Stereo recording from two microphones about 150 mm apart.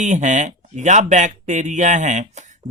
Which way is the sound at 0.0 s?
55° right (ahead or behind).